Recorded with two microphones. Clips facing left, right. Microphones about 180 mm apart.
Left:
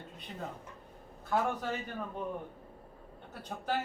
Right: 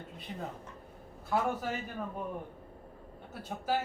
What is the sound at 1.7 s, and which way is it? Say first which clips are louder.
Speech: even; 5° right (ahead or behind).